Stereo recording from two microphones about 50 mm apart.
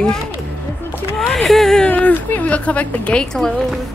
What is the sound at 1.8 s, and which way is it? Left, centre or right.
Speech, left.